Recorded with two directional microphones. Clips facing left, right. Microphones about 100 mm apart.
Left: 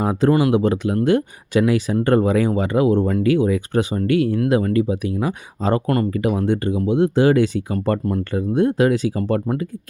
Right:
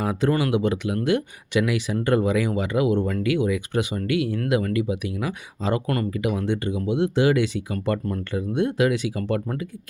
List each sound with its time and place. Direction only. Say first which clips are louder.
0.0 s speech: left 6 dB; 30° left (ahead or behind)
0.5 s speech: left 5 dB; 40° left (ahead or behind)